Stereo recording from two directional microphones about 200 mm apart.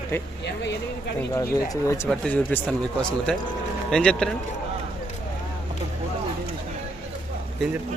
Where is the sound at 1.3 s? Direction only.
15° left (ahead or behind).